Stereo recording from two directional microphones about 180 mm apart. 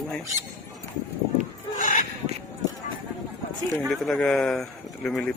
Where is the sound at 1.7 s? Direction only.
45° left (ahead or behind).